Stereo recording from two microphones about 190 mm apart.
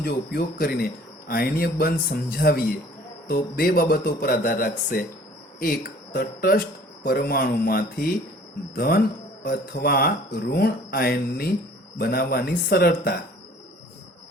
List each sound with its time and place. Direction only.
0.0 s speech: 55° left (ahead or behind)